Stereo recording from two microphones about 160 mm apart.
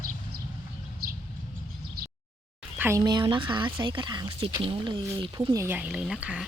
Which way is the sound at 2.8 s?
20° right (ahead or behind).